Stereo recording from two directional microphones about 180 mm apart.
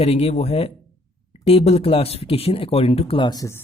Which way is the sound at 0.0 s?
35° left (ahead or behind).